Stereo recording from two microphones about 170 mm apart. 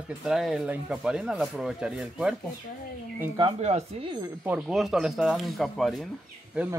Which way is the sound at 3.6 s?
40° right (ahead or behind).